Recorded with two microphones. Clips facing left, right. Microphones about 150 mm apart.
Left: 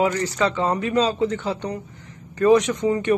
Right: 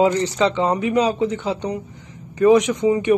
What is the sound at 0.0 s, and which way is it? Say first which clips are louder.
A man's voice: right 4 dB; 25° right (ahead or behind).